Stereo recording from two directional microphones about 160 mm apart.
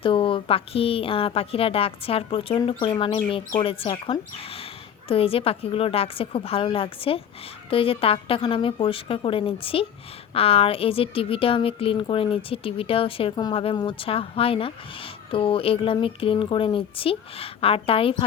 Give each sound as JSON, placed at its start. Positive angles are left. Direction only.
{"t": 0.0, "sound": "a woman's voice", "side_deg": 35}